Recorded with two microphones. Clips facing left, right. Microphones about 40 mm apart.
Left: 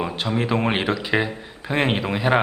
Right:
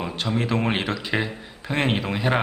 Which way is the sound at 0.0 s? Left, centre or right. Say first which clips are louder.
Left 2 dB; centre.